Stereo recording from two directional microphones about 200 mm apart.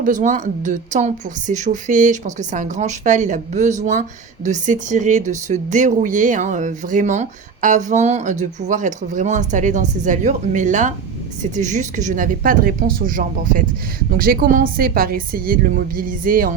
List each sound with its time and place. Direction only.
0.0 s a woman's voice: 40° right (ahead or behind)